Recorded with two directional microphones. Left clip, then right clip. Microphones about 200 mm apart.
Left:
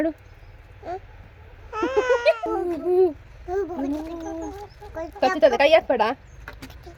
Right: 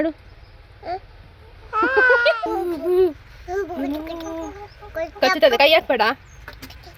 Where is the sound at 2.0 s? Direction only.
5° right (ahead or behind).